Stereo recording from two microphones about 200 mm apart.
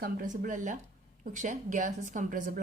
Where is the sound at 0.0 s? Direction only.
45° right (ahead or behind).